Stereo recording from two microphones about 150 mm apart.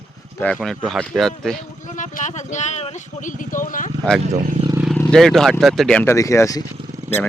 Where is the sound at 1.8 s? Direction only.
60° left (ahead or behind).